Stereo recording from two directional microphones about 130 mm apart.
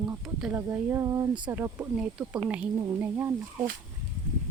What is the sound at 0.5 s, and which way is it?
A woman's voice, 20° right (ahead or behind).